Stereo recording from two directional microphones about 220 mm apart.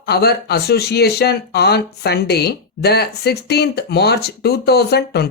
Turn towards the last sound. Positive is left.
turn(degrees=45)  # may be behind; listen again after turning